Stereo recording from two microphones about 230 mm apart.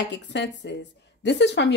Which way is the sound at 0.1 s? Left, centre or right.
Left.